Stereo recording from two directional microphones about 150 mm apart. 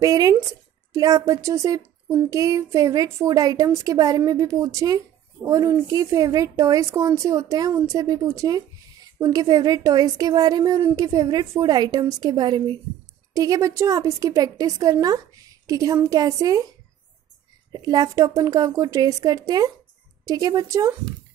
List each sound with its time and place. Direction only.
0.0 s a woman's voice: 25° right (ahead or behind)
17.7 s a woman's voice: 25° right (ahead or behind)